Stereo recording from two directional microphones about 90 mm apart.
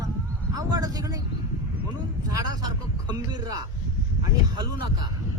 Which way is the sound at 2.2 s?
40° right (ahead or behind).